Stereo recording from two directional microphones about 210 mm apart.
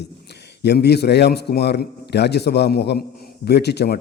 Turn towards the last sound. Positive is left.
turn(degrees=50)  # may be behind; listen again after turning